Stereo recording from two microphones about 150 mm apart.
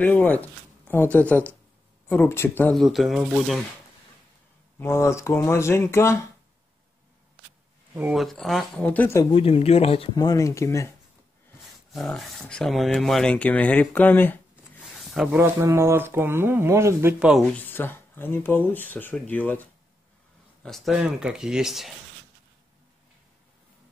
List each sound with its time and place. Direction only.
0.0 s speech: 10° left (ahead or behind)
2.7 s speech: centre (ahead or behind)
4.7 s speech: 15° left (ahead or behind)
8.1 s speech: centre (ahead or behind)
9.2 s speech: 40° left (ahead or behind)
10.1 s speech: 25° left (ahead or behind)
11.6 s speech: centre (ahead or behind)
14.5 s a sound: centre (ahead or behind)
15.3 s speech: 15° right (ahead or behind)
17.4 s speech: 10° left (ahead or behind)
20.6 s speech: centre (ahead or behind)